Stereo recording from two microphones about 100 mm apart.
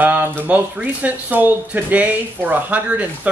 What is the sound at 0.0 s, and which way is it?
Speech, 20° right (ahead or behind).